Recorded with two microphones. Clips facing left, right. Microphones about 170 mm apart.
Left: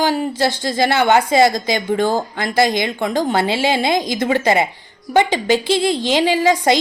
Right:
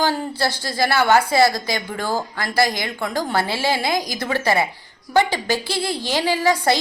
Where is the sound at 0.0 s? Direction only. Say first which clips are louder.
Left 4 dB; 15° left (ahead or behind).